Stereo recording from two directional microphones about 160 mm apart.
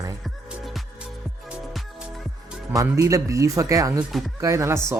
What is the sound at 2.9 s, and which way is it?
Speech, 20° right (ahead or behind).